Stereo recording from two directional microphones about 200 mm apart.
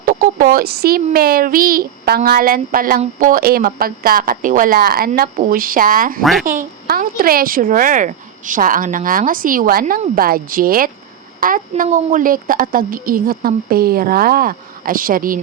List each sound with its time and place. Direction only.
0.0 s speech: 45° right (ahead or behind)